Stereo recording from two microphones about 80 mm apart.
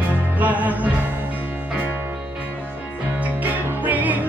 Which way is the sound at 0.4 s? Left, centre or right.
Right.